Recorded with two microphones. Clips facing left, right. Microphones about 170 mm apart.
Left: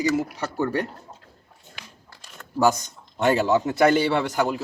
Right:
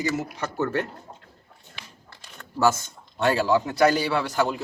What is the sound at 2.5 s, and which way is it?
A man's voice, 15° left (ahead or behind).